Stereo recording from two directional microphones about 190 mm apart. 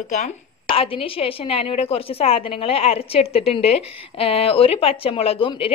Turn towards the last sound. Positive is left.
turn(degrees=30)  # may be behind; listen again after turning